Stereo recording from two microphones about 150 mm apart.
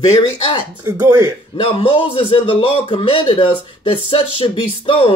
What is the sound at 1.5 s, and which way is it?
Speech, 40° left (ahead or behind).